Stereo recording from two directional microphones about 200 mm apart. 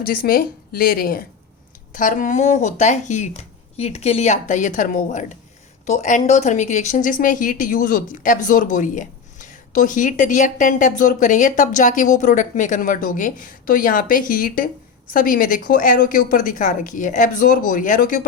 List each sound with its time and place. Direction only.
0.0 s a woman's voice: 45° left (ahead or behind)